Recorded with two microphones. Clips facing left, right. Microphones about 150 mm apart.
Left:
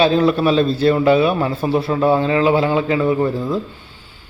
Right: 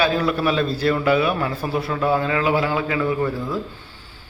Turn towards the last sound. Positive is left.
turn(degrees=25)  # may be behind; listen again after turning